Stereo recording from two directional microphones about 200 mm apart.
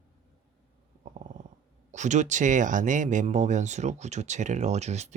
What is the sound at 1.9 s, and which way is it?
Speech, 35° right (ahead or behind).